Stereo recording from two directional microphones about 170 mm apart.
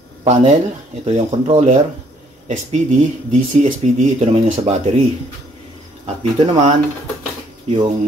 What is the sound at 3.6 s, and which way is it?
Speech, 45° right (ahead or behind).